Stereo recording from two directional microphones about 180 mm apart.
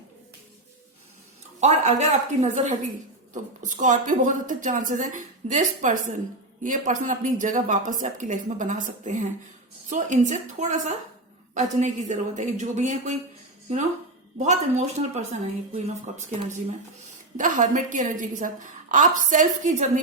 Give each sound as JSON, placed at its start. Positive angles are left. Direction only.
{"t": 1.6, "sound": "a woman's voice", "side_deg": -40}
{"t": 14.3, "sound": "a woman's voice", "side_deg": -40}
{"t": 17.3, "sound": "a woman's voice", "side_deg": -45}